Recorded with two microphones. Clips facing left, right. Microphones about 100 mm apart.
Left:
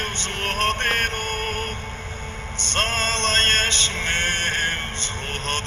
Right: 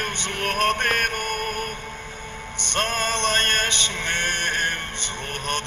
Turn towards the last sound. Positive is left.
turn(degrees=-15)  # may be behind; listen again after turning